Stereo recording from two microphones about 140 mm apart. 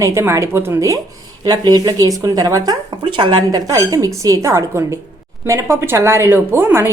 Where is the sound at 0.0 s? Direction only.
20° right (ahead or behind).